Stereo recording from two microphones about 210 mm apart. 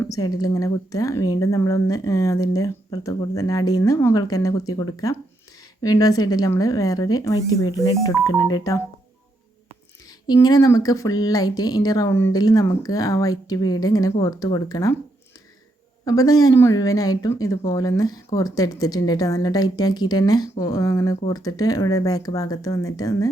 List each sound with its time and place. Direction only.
0.0 s speech: 15° left (ahead or behind)
10.2 s speech: 20° left (ahead or behind)
16.0 s speech: 15° left (ahead or behind)